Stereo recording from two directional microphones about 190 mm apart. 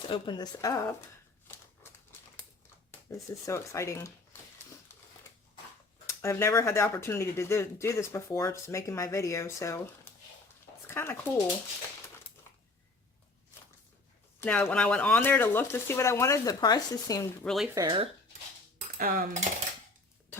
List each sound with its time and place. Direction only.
0.1 s speech: 25° left (ahead or behind)
3.1 s speech: 15° left (ahead or behind)
6.1 s speech: 15° left (ahead or behind)
14.4 s speech: 10° left (ahead or behind)
17.4 s speech: centre (ahead or behind)
17.7 s speech: 20° right (ahead or behind)
18.9 s speech: 50° right (ahead or behind)